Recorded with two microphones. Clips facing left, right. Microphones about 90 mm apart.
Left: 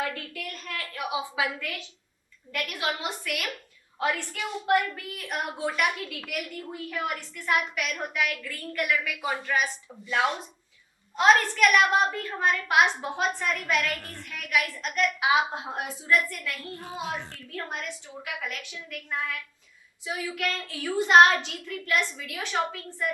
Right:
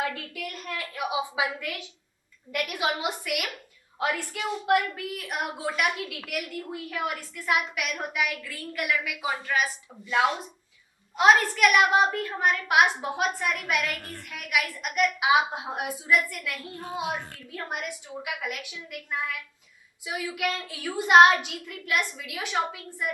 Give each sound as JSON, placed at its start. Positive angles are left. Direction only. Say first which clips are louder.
{"t": 0.0, "sound": "a woman's voice", "louder": "right 1 dB", "side_deg": -15}